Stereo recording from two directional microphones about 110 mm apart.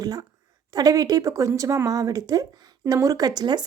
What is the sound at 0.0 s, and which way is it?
A woman's voice, 35° right (ahead or behind).